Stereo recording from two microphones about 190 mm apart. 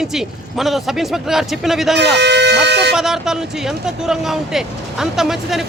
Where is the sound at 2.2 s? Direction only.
65° right (ahead or behind).